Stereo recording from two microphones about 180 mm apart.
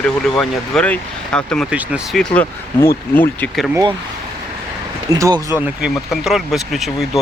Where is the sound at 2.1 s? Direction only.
10° left (ahead or behind).